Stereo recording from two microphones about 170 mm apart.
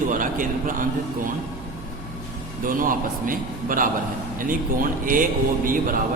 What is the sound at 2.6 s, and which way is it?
A man's voice, 55° right (ahead or behind).